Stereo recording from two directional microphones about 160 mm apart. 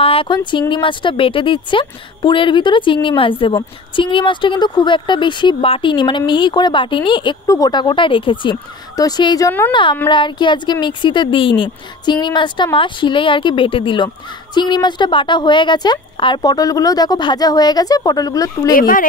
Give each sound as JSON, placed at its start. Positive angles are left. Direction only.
{"t": 0.0, "sound": "a woman's voice", "side_deg": 35}
{"t": 18.8, "sound": "speech", "side_deg": 60}